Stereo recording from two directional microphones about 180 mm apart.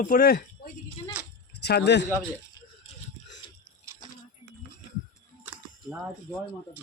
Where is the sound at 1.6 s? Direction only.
65° left (ahead or behind).